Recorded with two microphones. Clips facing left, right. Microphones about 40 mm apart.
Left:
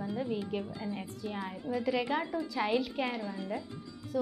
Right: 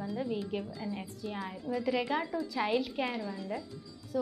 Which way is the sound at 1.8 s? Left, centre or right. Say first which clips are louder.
Even; centre.